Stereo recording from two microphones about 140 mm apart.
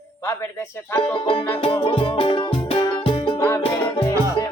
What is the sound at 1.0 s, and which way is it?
Music, 35° left (ahead or behind).